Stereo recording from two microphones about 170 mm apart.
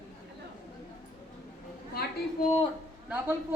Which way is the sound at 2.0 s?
65° left (ahead or behind).